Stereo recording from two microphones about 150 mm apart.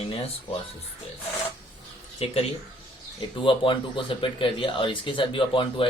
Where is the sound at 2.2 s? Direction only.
40° left (ahead or behind).